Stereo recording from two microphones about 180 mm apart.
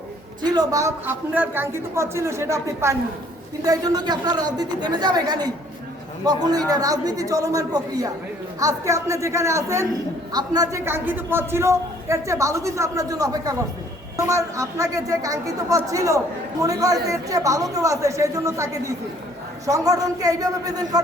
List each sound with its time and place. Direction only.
0.4 s a man's voice: 20° right (ahead or behind)